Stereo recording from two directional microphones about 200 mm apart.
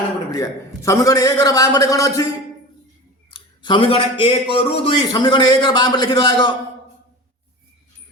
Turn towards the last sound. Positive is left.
turn(degrees=25)  # may be behind; listen again after turning